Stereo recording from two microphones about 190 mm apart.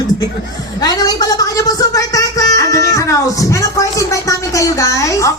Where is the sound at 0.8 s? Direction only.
20° left (ahead or behind).